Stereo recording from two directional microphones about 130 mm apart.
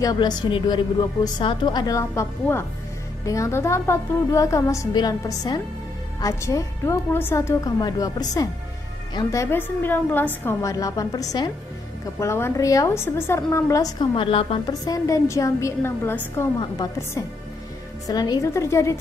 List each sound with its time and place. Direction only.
0.0 s a woman's voice: 30° left (ahead or behind)
12.2 s a woman's voice: 20° left (ahead or behind); by 14.6 s 45° left (ahead or behind)
14.7 s a woman's voice: 25° left (ahead or behind)